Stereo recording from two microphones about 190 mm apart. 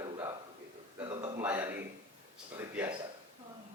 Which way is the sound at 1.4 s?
10° right (ahead or behind).